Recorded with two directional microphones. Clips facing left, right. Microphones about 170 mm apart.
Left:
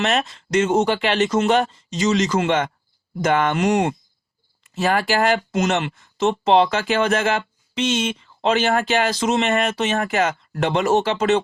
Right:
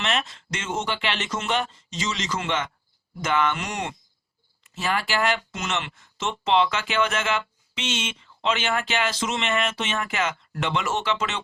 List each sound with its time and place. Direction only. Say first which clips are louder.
0.0 s speech: left 6 dB; 40° left (ahead or behind)